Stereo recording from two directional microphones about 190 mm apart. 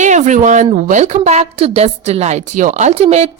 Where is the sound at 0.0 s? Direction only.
40° right (ahead or behind).